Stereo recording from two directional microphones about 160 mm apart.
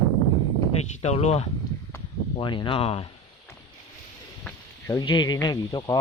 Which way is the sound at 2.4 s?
30° left (ahead or behind).